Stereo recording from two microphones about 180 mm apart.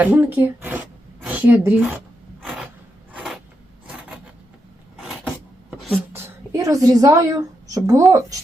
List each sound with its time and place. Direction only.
0.0 s a woman's voice: 10° right (ahead or behind)
3.1 s a sound: 5° right (ahead or behind)
6.1 s a woman's voice: 15° right (ahead or behind)